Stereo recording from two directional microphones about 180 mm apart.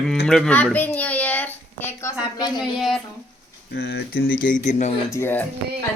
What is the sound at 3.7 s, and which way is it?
Speech, 65° left (ahead or behind).